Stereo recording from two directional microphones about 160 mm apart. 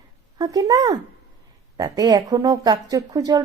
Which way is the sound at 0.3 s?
20° right (ahead or behind).